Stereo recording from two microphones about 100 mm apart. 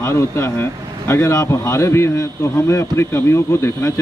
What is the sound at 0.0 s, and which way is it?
Speech, 25° left (ahead or behind).